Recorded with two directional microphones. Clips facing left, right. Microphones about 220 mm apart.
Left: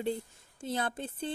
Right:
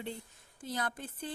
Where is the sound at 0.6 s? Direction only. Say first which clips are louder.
Left 4 dB; 25° left (ahead or behind).